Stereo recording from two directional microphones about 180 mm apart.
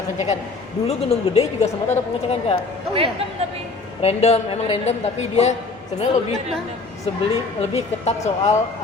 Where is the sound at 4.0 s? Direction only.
35° left (ahead or behind).